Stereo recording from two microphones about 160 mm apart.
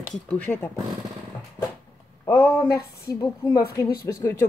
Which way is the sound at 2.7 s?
20° left (ahead or behind).